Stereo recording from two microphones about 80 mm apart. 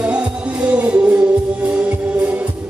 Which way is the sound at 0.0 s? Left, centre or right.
Centre.